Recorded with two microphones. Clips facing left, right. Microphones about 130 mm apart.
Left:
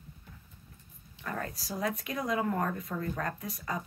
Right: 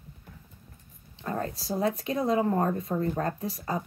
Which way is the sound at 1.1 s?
25° right (ahead or behind).